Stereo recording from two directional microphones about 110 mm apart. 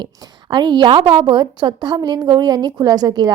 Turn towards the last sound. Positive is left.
turn(degrees=-35)  # may be behind; listen again after turning